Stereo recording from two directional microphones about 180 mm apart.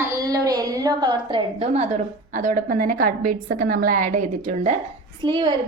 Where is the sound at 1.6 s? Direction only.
35° right (ahead or behind).